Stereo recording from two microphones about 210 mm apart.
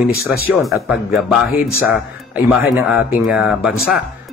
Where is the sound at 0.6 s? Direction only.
Centre (ahead or behind).